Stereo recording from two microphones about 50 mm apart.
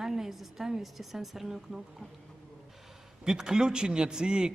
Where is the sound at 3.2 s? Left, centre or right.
Centre.